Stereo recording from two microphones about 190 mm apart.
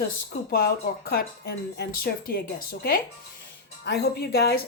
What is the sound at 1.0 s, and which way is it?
Speech, 55° left (ahead or behind).